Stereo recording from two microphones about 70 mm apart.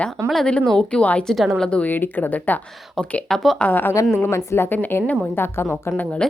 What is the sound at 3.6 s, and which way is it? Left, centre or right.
Speech, left.